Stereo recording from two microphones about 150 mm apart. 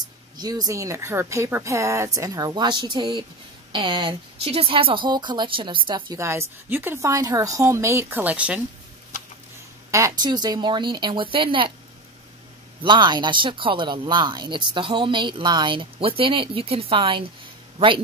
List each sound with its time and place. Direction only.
0.0 s speech: 25° right (ahead or behind)
6.1 s a woman's voice: 15° right (ahead or behind)
9.8 s speech: 20° right (ahead or behind)
12.8 s speech: 30° right (ahead or behind)